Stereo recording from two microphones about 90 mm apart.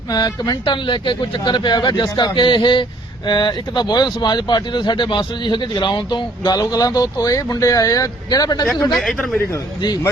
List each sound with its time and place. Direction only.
0.1 s speech: 50° left (ahead or behind)
0.6 s speech: 60° left (ahead or behind)
9.0 s speech: centre (ahead or behind)